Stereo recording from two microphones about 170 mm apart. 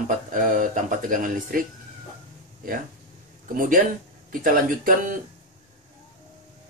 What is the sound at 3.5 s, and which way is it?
Speech, 55° right (ahead or behind).